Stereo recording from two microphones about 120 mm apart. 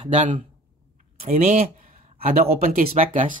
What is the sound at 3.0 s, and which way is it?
Speech, 70° right (ahead or behind).